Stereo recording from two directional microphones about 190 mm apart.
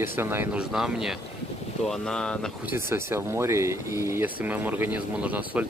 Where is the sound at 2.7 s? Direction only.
10° right (ahead or behind).